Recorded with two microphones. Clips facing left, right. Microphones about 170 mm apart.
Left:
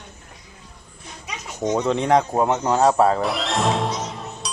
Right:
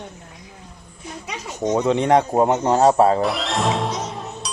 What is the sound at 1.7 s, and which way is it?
Speech, 10° right (ahead or behind).